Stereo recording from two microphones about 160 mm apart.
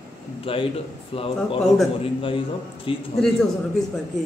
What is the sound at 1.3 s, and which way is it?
Speech, centre (ahead or behind).